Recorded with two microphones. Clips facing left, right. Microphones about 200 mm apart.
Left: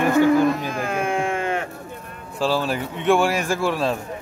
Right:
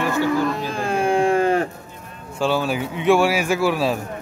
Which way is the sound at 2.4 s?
Centre (ahead or behind).